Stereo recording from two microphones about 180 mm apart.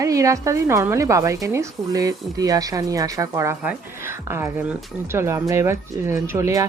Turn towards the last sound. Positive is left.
turn(degrees=-15)  # may be behind; listen again after turning